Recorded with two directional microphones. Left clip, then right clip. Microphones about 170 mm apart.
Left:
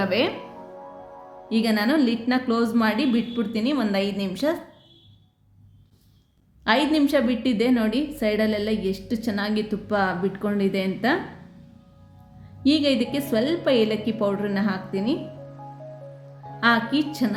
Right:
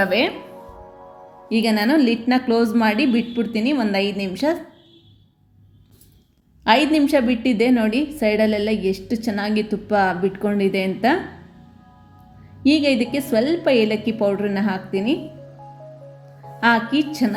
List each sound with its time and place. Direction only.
0.0 s a woman's voice: 5° right (ahead or behind)
1.5 s a woman's voice: 5° right (ahead or behind)
6.7 s a woman's voice: 5° right (ahead or behind)
12.6 s a woman's voice: 5° right (ahead or behind)
16.6 s a woman's voice: centre (ahead or behind)